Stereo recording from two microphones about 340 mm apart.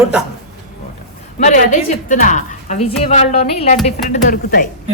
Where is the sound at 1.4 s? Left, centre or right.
Left.